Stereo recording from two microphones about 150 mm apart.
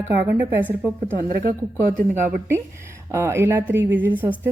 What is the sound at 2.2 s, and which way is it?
A woman's voice, 20° right (ahead or behind).